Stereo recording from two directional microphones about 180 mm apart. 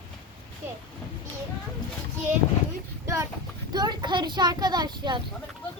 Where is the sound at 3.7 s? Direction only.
25° right (ahead or behind).